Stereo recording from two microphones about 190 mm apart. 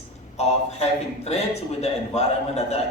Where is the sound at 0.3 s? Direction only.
35° left (ahead or behind).